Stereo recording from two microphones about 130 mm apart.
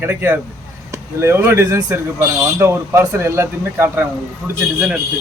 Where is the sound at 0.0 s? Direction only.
20° right (ahead or behind).